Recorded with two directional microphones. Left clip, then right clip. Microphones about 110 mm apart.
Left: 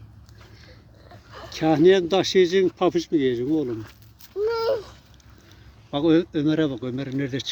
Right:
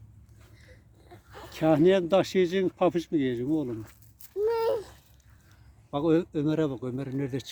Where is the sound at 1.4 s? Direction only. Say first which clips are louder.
Left 4 dB; 60° right (ahead or behind).